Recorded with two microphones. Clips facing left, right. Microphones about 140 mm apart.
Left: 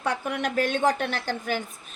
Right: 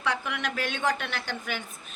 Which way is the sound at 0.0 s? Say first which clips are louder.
Left 3 dB; 45° left (ahead or behind).